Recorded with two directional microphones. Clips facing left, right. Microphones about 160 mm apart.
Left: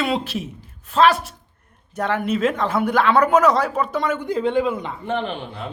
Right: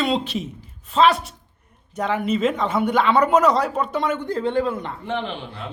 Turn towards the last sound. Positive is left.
turn(degrees=50)  # may be behind; listen again after turning